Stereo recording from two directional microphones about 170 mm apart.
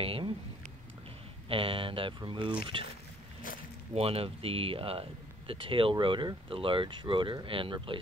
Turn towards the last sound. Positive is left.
turn(degrees=-30)  # may be behind; listen again after turning